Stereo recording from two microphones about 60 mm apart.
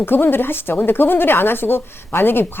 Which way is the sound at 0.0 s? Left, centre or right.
Left.